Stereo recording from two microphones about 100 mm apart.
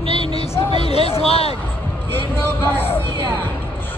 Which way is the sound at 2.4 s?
20° left (ahead or behind).